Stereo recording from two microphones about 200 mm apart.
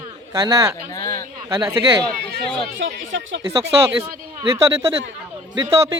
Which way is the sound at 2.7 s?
75° right (ahead or behind).